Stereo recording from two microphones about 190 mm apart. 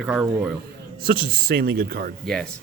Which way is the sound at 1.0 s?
50° right (ahead or behind).